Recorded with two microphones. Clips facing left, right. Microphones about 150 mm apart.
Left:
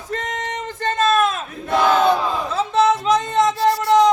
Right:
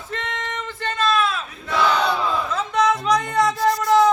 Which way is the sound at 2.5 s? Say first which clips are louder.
Left 5 dB; 30° left (ahead or behind).